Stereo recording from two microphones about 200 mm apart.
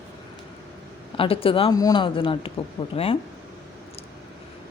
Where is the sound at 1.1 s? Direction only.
25° left (ahead or behind).